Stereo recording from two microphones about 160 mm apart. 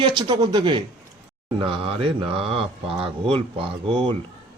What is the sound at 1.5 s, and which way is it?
Mantra, 30° right (ahead or behind).